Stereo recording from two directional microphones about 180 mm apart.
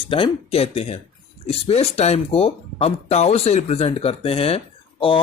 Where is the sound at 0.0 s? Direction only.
30° left (ahead or behind).